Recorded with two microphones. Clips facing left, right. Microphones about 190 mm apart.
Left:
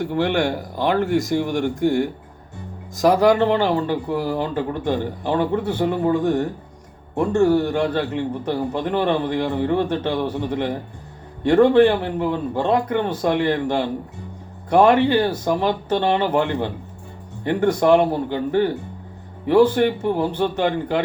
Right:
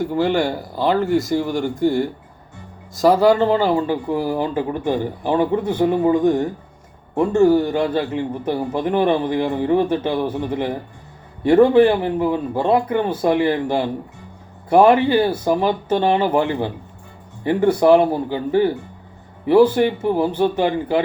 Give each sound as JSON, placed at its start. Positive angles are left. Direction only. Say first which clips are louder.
{"t": 0.0, "sound": "speech", "louder": "right 2 dB", "side_deg": -5}
{"t": 3.2, "sound": "a man's voice", "louder": "right 1 dB", "side_deg": 0}